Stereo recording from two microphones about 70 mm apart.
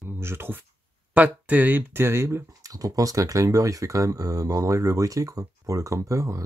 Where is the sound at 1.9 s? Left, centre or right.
Right.